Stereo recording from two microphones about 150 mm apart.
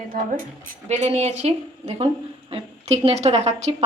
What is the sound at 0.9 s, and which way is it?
Speech, 45° right (ahead or behind).